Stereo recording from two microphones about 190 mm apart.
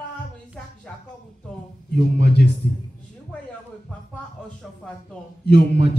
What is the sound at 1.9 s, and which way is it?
Speech, 60° left (ahead or behind).